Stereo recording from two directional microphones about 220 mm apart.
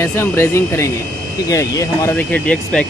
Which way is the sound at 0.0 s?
10° left (ahead or behind).